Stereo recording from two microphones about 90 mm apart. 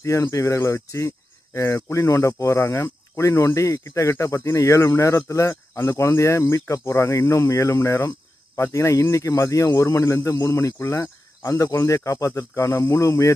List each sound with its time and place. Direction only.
0.0 s speech: 35° left (ahead or behind)